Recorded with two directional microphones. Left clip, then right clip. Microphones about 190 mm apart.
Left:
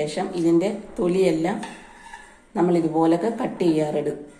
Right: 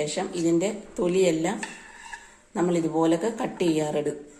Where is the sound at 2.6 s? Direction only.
30° right (ahead or behind).